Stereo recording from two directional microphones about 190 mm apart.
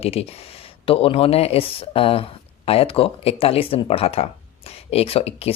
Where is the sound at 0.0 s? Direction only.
30° left (ahead or behind).